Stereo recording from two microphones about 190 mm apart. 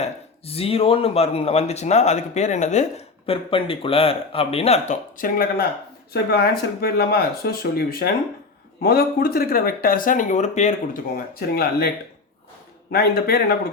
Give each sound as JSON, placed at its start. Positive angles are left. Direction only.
{"t": 0.0, "sound": "speech", "side_deg": 30}
{"t": 12.9, "sound": "speech", "side_deg": 55}